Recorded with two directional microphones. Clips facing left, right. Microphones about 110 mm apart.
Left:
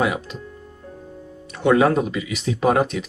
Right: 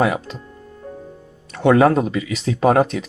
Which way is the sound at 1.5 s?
40° right (ahead or behind).